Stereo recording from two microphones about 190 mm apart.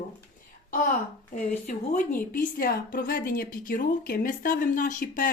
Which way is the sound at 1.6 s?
45° left (ahead or behind).